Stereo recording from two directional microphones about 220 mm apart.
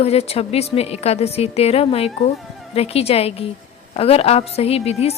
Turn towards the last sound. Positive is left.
turn(degrees=30)  # may be behind; listen again after turning